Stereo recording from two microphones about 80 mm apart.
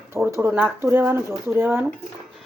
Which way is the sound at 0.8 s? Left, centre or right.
Right.